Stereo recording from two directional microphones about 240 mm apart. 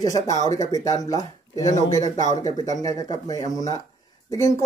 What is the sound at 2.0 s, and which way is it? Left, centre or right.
Speech, right.